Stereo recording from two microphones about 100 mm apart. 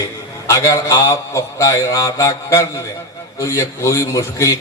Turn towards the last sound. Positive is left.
turn(degrees=30)  # may be behind; listen again after turning